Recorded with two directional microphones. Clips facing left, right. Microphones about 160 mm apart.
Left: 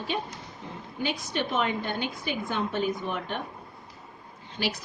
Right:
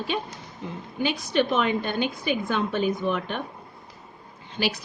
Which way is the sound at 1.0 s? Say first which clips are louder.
Right 7 dB; 90° right.